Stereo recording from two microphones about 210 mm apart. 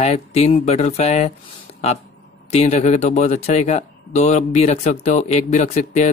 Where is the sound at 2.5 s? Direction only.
30° left (ahead or behind).